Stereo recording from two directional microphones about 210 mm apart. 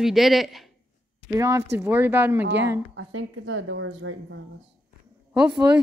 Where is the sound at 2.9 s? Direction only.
65° right (ahead or behind).